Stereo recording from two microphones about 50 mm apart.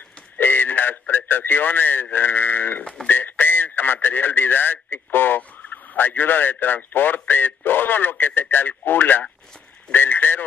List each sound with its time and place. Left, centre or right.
0.4 s a man's voice: left